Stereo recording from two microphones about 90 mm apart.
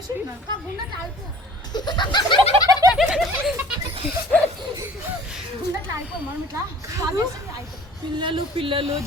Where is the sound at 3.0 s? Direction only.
Centre (ahead or behind).